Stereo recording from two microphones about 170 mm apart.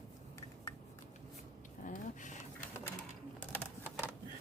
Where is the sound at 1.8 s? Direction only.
50° left (ahead or behind).